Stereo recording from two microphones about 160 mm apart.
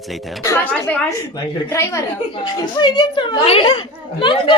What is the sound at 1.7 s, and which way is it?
A woman's voice, 20° left (ahead or behind).